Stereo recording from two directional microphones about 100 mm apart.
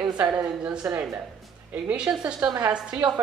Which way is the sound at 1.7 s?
10° right (ahead or behind).